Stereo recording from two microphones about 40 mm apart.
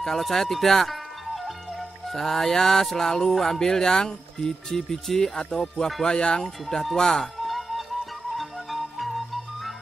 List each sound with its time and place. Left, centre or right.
0.0 s speech: centre
5.3 s music: left
6.7 s speech: centre
7.3 s music: centre